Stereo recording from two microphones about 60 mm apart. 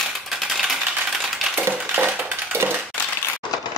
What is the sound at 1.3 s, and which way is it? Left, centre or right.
Coin, centre.